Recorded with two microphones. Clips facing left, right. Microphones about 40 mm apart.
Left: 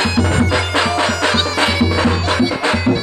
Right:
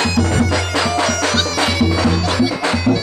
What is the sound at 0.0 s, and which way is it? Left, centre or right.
Bagpipes, left.